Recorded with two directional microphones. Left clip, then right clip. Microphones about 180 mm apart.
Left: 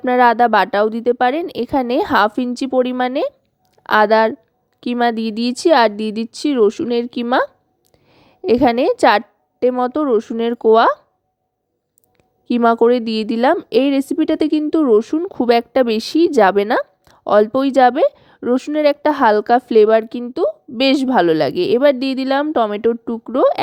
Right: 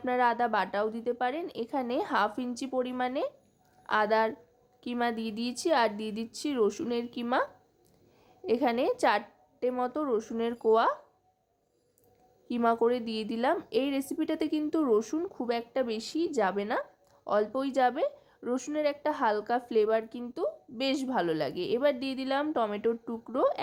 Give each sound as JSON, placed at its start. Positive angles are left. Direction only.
{"t": 0.0, "sound": "a woman's voice", "side_deg": 45}
{"t": 12.5, "sound": "speech", "side_deg": 40}